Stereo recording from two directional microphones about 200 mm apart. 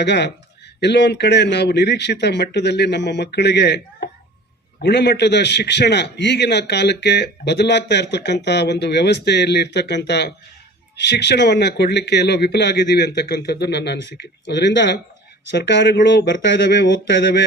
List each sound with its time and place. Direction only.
0.0 s a man's voice: 55° left (ahead or behind)